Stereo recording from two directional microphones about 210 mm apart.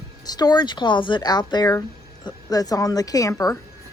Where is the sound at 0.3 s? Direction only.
20° left (ahead or behind).